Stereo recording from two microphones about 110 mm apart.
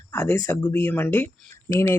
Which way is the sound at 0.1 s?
15° left (ahead or behind).